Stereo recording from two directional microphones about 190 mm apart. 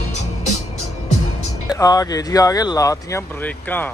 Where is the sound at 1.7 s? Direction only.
20° left (ahead or behind).